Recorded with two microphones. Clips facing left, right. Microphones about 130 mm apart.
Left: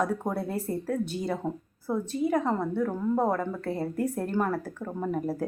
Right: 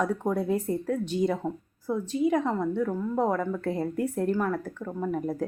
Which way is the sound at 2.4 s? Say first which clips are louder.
Even; 10° left (ahead or behind).